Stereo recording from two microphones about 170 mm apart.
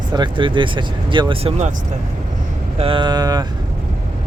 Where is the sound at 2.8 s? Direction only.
30° right (ahead or behind).